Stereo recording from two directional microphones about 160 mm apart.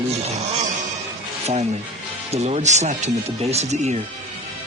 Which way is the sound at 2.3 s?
45° right (ahead or behind).